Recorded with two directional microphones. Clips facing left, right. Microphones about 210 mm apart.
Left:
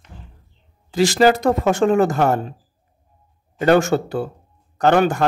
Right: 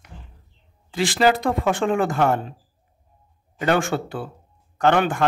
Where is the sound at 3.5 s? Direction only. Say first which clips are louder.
Left 6 dB; 40° left (ahead or behind).